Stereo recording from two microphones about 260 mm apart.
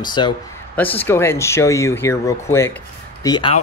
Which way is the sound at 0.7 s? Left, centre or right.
Centre.